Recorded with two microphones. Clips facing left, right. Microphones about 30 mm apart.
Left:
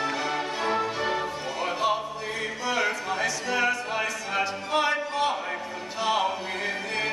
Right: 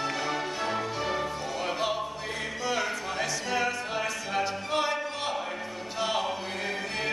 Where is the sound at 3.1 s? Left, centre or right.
Centre.